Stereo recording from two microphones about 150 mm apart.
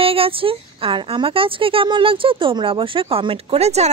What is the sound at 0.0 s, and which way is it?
Speech, 40° right (ahead or behind).